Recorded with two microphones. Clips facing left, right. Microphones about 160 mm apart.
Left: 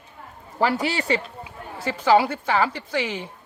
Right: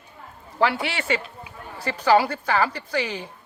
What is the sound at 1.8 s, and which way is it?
A woman's voice, 25° left (ahead or behind).